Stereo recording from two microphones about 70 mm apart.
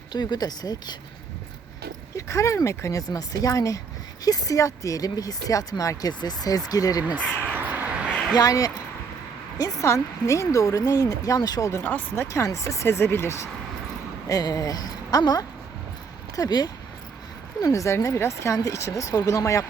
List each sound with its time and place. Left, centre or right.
0.1 s speech: left
2.1 s speech: left
6.1 s speech: left
7.4 s crow: right
8.4 s speech: left
11.8 s speech: left
12.4 s speech: left
14.3 s speech: left
17.6 s speech: left